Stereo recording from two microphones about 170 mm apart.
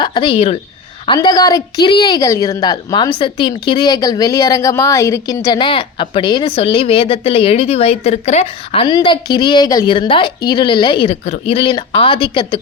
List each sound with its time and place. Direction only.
0.0 s a woman's voice: 30° left (ahead or behind)